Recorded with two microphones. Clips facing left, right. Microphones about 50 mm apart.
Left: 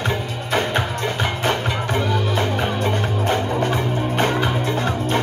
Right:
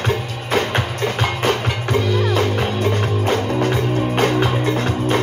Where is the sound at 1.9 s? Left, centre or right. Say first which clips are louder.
Right 4 dB; left.